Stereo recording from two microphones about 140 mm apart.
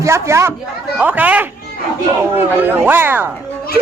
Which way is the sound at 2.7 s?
15° right (ahead or behind).